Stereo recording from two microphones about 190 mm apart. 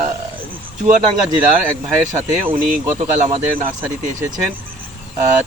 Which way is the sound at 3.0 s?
35° right (ahead or behind).